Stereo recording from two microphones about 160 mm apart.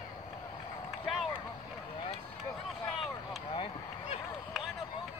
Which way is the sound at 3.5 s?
30° left (ahead or behind).